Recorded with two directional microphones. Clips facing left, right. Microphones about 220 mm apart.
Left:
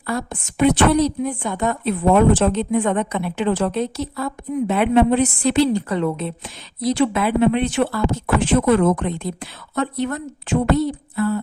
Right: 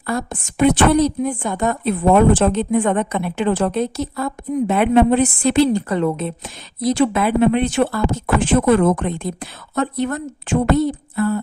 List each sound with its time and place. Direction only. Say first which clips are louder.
0.1 s a woman's voice: right 2 dB; 45° right (ahead or behind)